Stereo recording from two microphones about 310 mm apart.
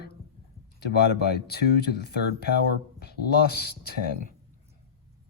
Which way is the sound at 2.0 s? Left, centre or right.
Left.